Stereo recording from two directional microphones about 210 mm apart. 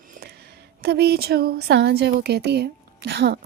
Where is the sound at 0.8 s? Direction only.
50° right (ahead or behind).